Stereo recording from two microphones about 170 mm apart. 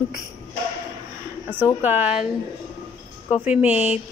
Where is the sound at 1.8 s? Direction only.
10° right (ahead or behind).